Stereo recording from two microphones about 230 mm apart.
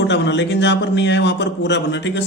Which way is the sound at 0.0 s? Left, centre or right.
Left.